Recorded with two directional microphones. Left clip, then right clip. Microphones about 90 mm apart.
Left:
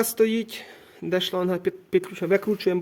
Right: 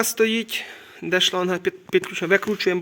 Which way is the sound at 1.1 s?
25° left (ahead or behind).